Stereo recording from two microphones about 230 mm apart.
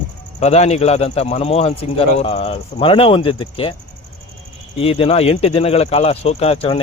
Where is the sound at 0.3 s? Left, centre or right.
Left.